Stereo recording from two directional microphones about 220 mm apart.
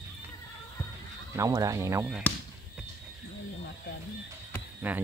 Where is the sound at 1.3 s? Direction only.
15° right (ahead or behind).